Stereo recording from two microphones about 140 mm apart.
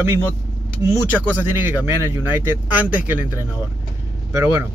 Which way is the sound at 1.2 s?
15° right (ahead or behind).